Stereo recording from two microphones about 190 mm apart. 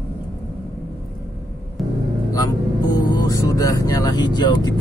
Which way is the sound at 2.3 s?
20° left (ahead or behind).